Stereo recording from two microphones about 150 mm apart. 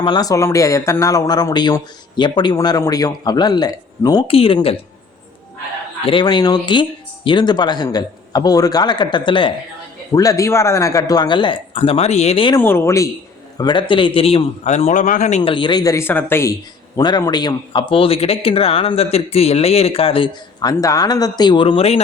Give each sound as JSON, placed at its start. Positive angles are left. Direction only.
{"t": 0.0, "sound": "speech", "side_deg": 30}
{"t": 4.3, "sound": "speech", "side_deg": 40}
{"t": 6.1, "sound": "speech", "side_deg": 30}
{"t": 10.2, "sound": "speech", "side_deg": 20}
{"t": 12.5, "sound": "speech", "side_deg": 15}
{"t": 13.6, "sound": "speech", "side_deg": 30}
{"t": 15.4, "sound": "speech", "side_deg": 30}
{"t": 17.0, "sound": "speech", "side_deg": 30}